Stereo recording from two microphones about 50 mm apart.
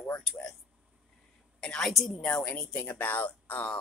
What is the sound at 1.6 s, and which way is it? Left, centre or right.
Speech, centre.